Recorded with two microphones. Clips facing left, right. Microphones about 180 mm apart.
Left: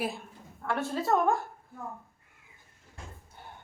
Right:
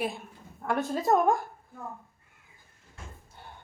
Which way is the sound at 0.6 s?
15° right (ahead or behind).